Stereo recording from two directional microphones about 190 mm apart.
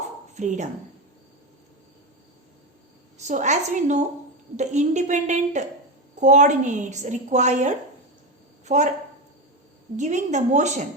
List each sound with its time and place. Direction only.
0.3 s a woman's voice: 40° right (ahead or behind)
3.2 s a woman's voice: 40° right (ahead or behind)
10.0 s a woman's voice: 40° right (ahead or behind)